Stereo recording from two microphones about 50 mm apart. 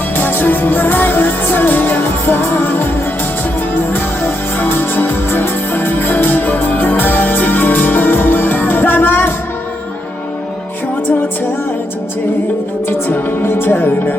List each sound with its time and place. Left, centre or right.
0.2 s music: left
12.9 s speech: left